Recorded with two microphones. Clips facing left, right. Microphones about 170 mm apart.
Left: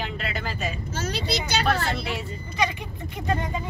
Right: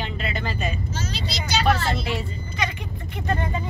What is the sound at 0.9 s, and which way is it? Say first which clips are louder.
Speech: left 3 dB; 60° left (ahead or behind).